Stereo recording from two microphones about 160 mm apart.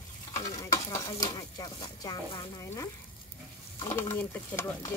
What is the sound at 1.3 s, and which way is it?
Speech, 25° left (ahead or behind).